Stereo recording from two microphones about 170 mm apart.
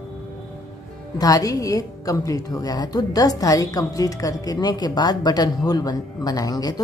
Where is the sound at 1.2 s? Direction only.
20° left (ahead or behind).